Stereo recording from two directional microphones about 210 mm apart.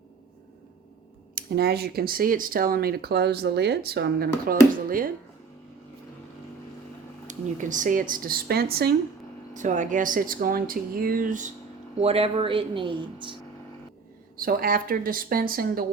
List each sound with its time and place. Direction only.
1.4 s speech: 50° right (ahead or behind)
7.3 s speech: 35° right (ahead or behind)
9.5 s speech: 35° right (ahead or behind)
11.9 s speech: 30° right (ahead or behind)
14.3 s speech: 45° right (ahead or behind)